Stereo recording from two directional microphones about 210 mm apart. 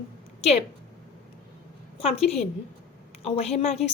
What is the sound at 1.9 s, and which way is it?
Speech, 30° left (ahead or behind).